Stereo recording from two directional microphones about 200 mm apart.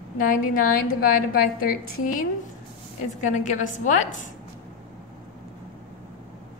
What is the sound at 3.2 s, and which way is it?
A woman's voice, 40° left (ahead or behind).